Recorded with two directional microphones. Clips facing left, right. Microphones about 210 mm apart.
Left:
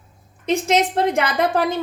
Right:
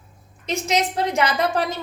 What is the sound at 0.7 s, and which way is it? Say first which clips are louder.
Speech: left 3 dB; 55° left (ahead or behind).